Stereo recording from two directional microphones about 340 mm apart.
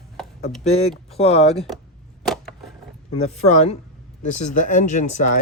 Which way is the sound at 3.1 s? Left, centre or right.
Centre.